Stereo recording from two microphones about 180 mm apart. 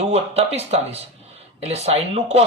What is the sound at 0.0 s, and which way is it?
Speech, 35° right (ahead or behind).